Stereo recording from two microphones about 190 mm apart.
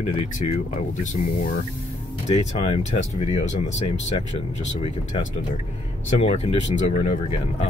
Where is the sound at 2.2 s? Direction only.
30° left (ahead or behind).